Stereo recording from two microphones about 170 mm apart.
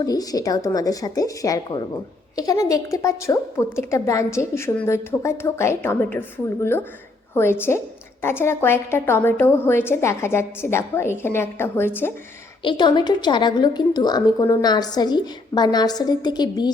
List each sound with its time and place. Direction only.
0.0 s a woman's voice: 20° left (ahead or behind)
12.6 s a woman's voice: 25° left (ahead or behind)